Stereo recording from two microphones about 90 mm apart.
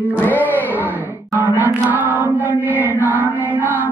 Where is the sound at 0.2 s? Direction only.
20° left (ahead or behind).